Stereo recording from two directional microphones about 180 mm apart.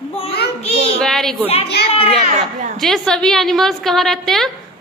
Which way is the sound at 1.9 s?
35° left (ahead or behind).